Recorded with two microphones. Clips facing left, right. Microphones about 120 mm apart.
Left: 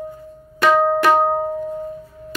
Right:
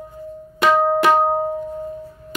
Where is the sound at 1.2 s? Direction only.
10° right (ahead or behind).